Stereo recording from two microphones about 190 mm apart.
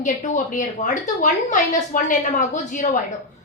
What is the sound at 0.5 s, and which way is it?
A woman's voice, 40° left (ahead or behind).